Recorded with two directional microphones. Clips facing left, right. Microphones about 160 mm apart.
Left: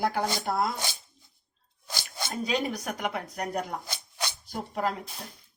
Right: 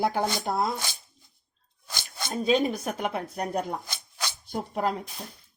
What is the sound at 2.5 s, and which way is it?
Speech, 25° right (ahead or behind).